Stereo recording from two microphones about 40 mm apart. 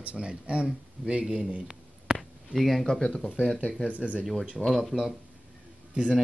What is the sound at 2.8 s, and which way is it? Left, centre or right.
Speech, centre.